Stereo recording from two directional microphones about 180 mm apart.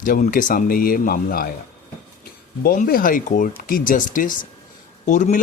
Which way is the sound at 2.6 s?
50° left (ahead or behind).